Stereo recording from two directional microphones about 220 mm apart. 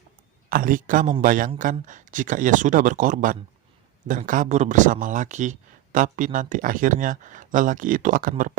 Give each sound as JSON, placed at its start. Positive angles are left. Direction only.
{"t": 0.5, "sound": "speech", "side_deg": -40}